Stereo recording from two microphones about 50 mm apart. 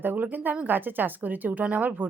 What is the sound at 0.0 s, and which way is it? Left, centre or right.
A woman's voice, right.